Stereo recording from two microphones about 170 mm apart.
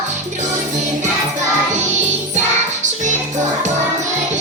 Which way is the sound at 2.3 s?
45° right (ahead or behind).